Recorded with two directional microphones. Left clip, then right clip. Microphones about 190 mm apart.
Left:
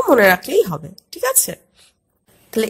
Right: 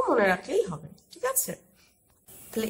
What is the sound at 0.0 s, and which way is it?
Speech, 40° left (ahead or behind).